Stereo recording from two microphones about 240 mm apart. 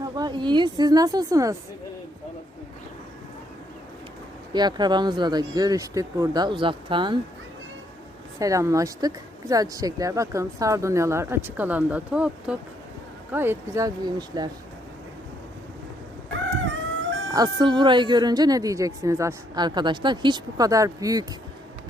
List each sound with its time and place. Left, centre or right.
0.0 s speech: centre
4.5 s speech: centre
8.4 s speech: centre
17.3 s speech: centre